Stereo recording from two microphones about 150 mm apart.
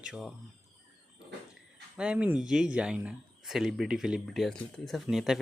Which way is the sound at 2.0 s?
10° right (ahead or behind).